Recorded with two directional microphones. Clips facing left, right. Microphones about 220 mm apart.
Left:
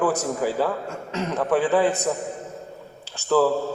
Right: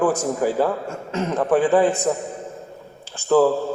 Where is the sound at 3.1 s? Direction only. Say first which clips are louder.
Right 3 dB; 45° right (ahead or behind).